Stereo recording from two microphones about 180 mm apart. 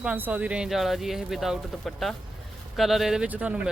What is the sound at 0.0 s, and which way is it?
Speech, 5° right (ahead or behind).